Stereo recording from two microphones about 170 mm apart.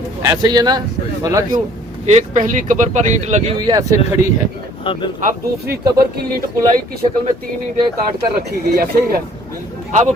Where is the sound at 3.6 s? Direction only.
20° right (ahead or behind).